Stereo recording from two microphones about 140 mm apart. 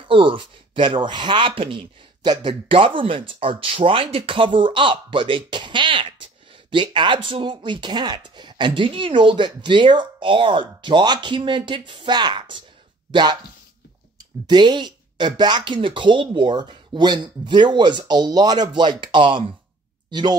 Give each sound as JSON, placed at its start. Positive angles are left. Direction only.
{"t": 0.1, "sound": "speech", "side_deg": -40}